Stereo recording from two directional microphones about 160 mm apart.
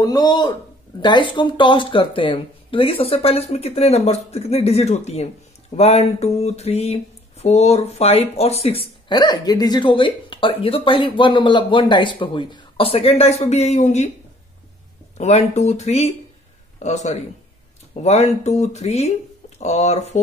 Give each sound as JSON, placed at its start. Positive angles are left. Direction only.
{"t": 0.0, "sound": "speech", "side_deg": 25}
{"t": 1.0, "sound": "a sound", "side_deg": 30}
{"t": 15.1, "sound": "speech", "side_deg": 45}